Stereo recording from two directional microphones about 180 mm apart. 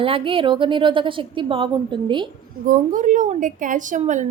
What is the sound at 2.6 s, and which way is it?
A woman's voice, 50° right (ahead or behind).